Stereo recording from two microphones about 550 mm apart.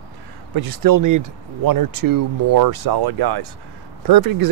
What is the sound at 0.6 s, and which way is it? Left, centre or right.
Speech, right.